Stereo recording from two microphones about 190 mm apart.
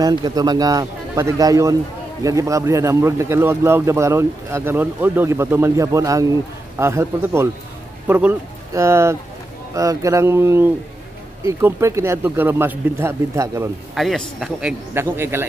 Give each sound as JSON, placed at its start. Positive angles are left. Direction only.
{"t": 0.0, "sound": "a man's voice", "side_deg": -20}
{"t": 13.9, "sound": "speech", "side_deg": 0}